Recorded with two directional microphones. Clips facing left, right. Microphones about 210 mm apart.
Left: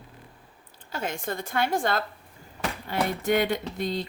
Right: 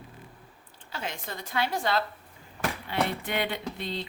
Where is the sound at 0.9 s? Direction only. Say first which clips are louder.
Left 6 dB; 50° left (ahead or behind).